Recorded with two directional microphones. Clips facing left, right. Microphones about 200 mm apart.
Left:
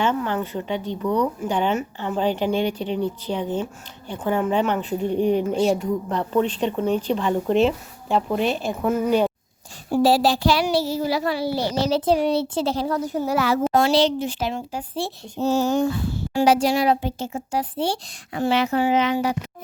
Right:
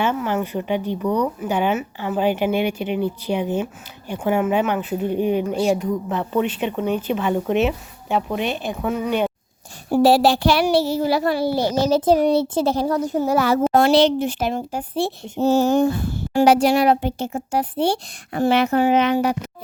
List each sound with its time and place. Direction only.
0.0 s speech: 10° right (ahead or behind)
9.9 s a child's voice: 65° right (ahead or behind)
13.7 s speech: 60° right (ahead or behind)